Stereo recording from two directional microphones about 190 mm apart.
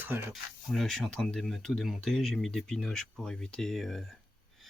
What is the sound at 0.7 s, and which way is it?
Speech, centre (ahead or behind).